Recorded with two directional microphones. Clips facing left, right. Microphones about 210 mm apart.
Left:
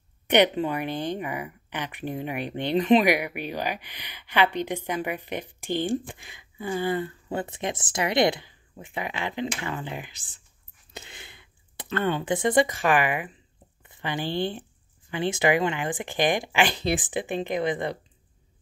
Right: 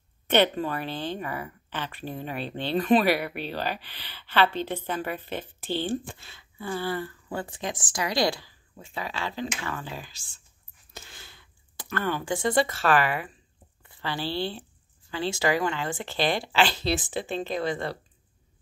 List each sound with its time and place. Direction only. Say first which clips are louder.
0.3 s speech: left 2 dB; 15° left (ahead or behind)
10.9 s a sound: left 4 dB; 20° left (ahead or behind)
13.8 s speech: left 1 dB; 20° left (ahead or behind)